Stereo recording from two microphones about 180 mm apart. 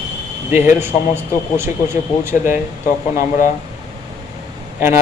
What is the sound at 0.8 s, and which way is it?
Speech, 15° right (ahead or behind).